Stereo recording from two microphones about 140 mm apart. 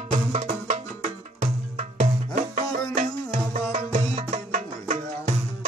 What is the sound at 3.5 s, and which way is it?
Music, 55° right (ahead or behind).